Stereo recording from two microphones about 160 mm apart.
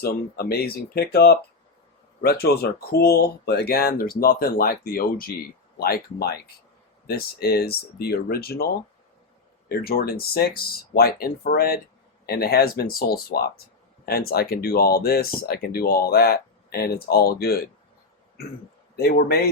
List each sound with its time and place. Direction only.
0.0 s speech: 75° left (ahead or behind)
18.9 s speech: 80° left